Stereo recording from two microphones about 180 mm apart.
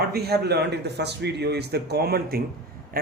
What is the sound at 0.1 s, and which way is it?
Speech, 60° right (ahead or behind).